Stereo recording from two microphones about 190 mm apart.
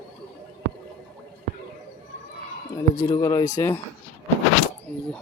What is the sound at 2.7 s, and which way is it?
Speech, 20° left (ahead or behind).